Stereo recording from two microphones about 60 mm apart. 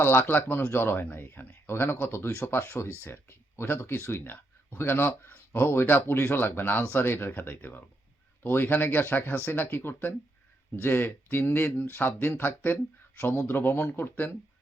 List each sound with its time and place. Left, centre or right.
0.0 s speech: left
4.1 s speech: left